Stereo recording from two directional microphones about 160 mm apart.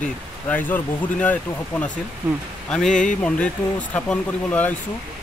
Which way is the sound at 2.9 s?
55° left (ahead or behind).